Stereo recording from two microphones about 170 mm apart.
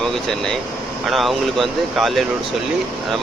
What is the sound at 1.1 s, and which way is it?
Speech, centre (ahead or behind).